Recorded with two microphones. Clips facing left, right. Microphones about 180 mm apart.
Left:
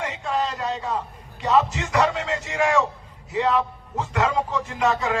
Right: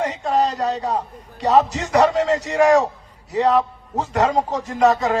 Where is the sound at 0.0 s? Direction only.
40° right (ahead or behind).